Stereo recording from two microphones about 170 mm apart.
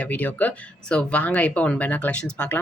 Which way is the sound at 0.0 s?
10° left (ahead or behind).